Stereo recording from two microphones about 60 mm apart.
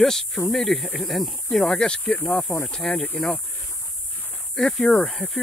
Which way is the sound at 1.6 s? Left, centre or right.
Centre.